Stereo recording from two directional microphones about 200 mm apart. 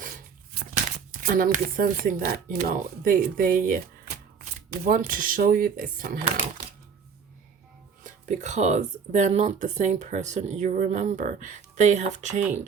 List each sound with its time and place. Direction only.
0.6 s a sound: 55° right (ahead or behind)
0.9 s speech: 45° right (ahead or behind)
8.0 s speech: 40° right (ahead or behind)